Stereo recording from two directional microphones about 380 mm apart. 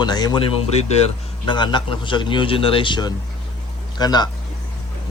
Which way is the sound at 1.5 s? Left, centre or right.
Centre.